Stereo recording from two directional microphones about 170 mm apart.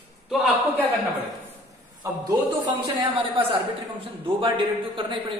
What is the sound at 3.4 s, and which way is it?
A man's voice, 35° right (ahead or behind).